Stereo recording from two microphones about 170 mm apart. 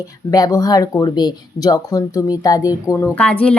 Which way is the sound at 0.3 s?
20° left (ahead or behind).